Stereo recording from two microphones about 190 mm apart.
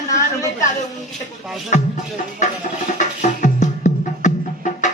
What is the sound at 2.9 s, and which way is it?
Music, 40° left (ahead or behind).